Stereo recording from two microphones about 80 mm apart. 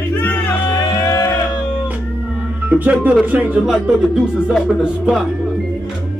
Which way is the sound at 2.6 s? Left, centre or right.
Right.